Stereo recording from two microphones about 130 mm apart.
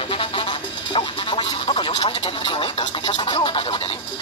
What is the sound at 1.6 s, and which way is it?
Speech, 40° left (ahead or behind).